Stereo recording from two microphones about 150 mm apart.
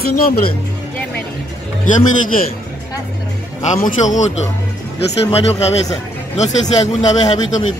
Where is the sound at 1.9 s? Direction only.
65° left (ahead or behind).